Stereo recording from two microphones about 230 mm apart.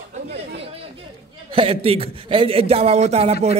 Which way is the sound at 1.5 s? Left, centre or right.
Right.